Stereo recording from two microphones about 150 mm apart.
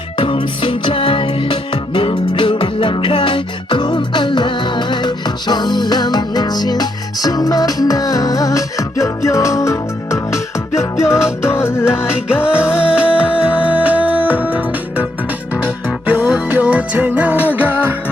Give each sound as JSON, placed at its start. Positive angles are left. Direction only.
{"t": 0.2, "sound": "music", "side_deg": 35}
{"t": 12.5, "sound": "music", "side_deg": -5}
{"t": 16.0, "sound": "music", "side_deg": -10}